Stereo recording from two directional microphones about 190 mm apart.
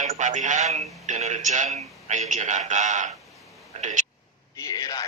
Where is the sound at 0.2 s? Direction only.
40° right (ahead or behind).